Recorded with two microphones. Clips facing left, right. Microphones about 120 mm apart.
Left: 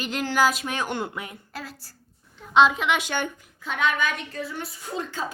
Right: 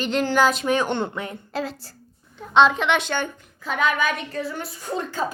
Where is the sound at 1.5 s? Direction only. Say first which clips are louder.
Right 10 dB; 25° right (ahead or behind).